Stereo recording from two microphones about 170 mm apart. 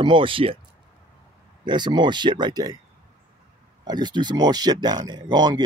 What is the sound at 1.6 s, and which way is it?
Speech, 25° right (ahead or behind).